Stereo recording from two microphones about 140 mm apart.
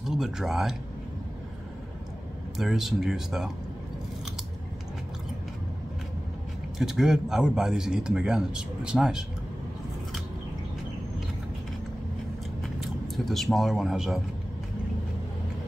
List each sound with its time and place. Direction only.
0.0 s speech: 5° right (ahead or behind)
2.5 s speech: centre (ahead or behind)
6.8 s speech: 5° right (ahead or behind)
12.6 s speech: centre (ahead or behind)